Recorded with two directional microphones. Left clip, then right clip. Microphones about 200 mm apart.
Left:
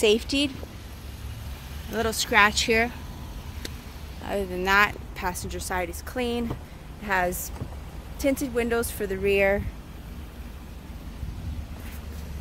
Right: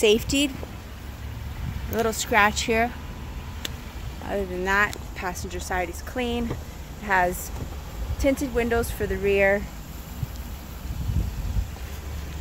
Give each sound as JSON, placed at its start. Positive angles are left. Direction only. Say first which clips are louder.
{"t": 0.0, "sound": "speech", "louder": "right 2 dB", "side_deg": 0}
{"t": 1.9, "sound": "speech", "louder": "right 2 dB", "side_deg": 0}
{"t": 4.3, "sound": "speech", "louder": "left 1 dB", "side_deg": 15}